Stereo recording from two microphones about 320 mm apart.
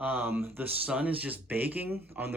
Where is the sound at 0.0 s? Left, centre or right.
Centre.